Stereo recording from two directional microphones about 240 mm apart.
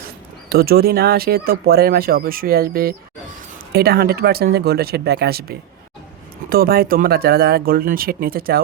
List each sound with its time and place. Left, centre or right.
0.5 s speech: right